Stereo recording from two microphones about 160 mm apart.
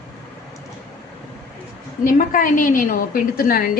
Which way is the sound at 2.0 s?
55° left (ahead or behind).